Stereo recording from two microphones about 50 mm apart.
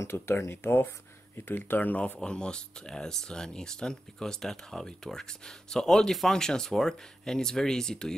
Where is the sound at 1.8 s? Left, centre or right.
Left.